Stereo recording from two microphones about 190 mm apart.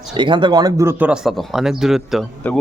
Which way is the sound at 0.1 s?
25° right (ahead or behind).